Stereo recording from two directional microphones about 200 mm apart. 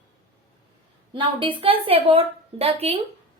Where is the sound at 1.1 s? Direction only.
25° right (ahead or behind).